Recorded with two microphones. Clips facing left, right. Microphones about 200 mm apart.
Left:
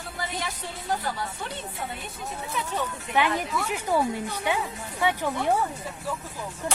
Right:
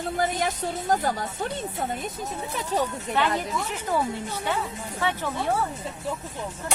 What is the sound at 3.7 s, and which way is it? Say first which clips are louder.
Speech: left 3 dB; 10° left (ahead or behind).